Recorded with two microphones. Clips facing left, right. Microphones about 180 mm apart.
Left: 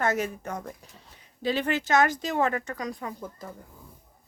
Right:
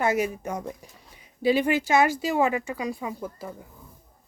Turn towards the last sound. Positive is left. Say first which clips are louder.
# right 4 dB
turn(degrees=-10)  # may be behind; listen again after turning